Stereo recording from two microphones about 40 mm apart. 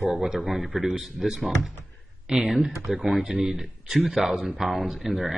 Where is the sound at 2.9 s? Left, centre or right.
Centre.